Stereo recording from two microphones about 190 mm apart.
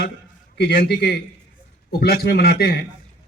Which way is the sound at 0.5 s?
60° left (ahead or behind).